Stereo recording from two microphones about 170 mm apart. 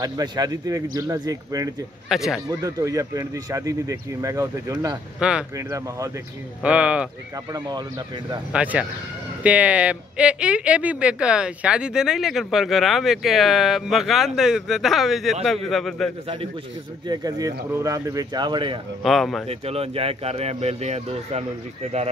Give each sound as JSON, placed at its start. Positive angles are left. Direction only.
{"t": 0.0, "sound": "speech", "side_deg": -20}
{"t": 2.0, "sound": "speech", "side_deg": 0}
{"t": 2.5, "sound": "speech", "side_deg": -20}
{"t": 5.2, "sound": "speech", "side_deg": -5}
{"t": 5.6, "sound": "speech", "side_deg": -20}
{"t": 6.6, "sound": "speech", "side_deg": -5}
{"t": 7.5, "sound": "speech", "side_deg": -25}
{"t": 8.5, "sound": "speech", "side_deg": -5}
{"t": 17.1, "sound": "speech", "side_deg": -20}
{"t": 19.0, "sound": "speech", "side_deg": 0}
{"t": 19.4, "sound": "speech", "side_deg": -35}